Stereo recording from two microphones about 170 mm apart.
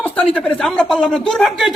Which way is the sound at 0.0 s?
10° left (ahead or behind).